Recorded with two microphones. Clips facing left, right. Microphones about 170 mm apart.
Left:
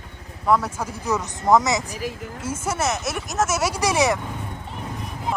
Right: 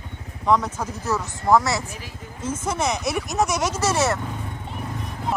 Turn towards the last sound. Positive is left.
turn(degrees=15)  # may be behind; listen again after turning